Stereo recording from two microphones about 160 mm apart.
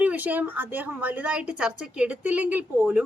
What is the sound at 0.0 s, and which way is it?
A woman's voice, 10° right (ahead or behind).